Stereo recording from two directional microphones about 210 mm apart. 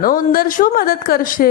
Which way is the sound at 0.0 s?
40° left (ahead or behind).